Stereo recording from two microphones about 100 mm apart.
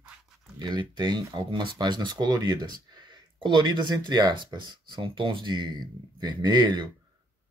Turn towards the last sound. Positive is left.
turn(degrees=-45)  # may be behind; listen again after turning